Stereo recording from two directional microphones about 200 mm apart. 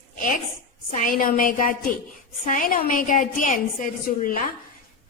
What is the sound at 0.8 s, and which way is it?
A woman's voice, 40° left (ahead or behind).